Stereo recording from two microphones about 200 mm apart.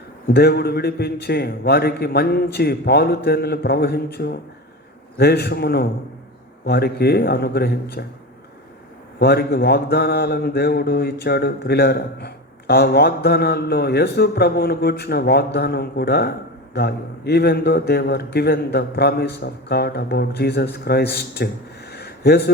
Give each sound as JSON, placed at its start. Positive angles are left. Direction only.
{"t": 0.3, "sound": "mantra", "side_deg": 55}
{"t": 9.1, "sound": "mantra", "side_deg": 50}